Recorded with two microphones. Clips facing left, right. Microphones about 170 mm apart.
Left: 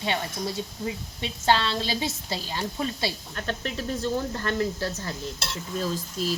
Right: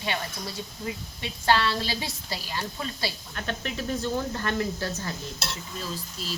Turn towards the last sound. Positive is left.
turn(degrees=45)  # may be behind; listen again after turning